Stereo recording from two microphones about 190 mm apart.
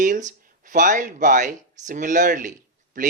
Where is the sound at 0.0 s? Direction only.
40° right (ahead or behind).